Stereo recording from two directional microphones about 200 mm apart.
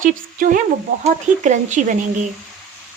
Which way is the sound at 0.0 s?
40° right (ahead or behind).